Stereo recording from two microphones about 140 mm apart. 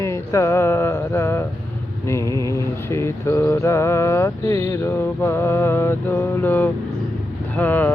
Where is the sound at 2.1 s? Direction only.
20° left (ahead or behind).